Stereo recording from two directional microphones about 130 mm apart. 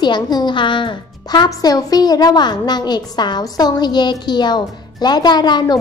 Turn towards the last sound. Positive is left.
turn(degrees=35)  # may be behind; listen again after turning